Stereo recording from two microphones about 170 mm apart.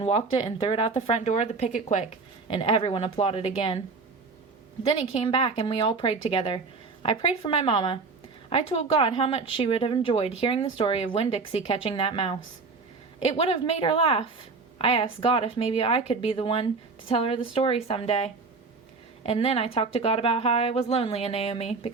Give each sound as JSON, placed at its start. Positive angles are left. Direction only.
{"t": 0.0, "sound": "a woman's voice", "side_deg": 35}
{"t": 2.5, "sound": "a woman's voice", "side_deg": 30}
{"t": 4.8, "sound": "a woman's voice", "side_deg": 35}